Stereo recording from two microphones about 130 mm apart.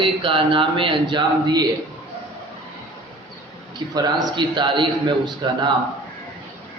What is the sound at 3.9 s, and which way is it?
Speech, 30° right (ahead or behind).